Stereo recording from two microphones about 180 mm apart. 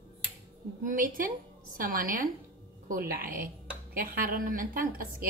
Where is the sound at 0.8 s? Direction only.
50° right (ahead or behind).